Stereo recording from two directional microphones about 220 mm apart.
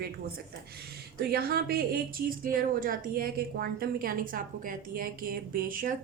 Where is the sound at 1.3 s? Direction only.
45° right (ahead or behind).